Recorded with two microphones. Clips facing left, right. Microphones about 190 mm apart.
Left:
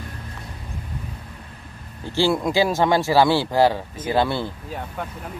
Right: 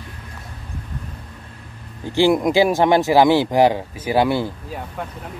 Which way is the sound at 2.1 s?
15° right (ahead or behind).